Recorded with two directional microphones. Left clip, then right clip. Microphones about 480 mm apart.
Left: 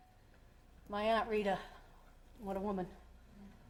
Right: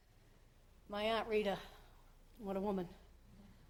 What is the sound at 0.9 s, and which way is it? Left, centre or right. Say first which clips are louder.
A woman's voice: left 3 dB; centre.